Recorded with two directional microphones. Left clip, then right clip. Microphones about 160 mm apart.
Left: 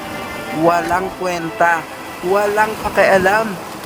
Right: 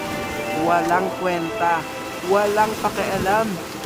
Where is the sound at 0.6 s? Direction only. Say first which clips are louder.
Left 4 dB; 35° left (ahead or behind).